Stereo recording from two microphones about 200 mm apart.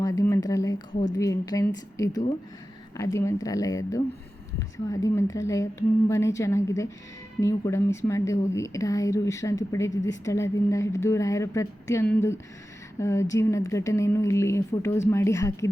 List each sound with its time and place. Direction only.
0.0 s speech: 15° left (ahead or behind)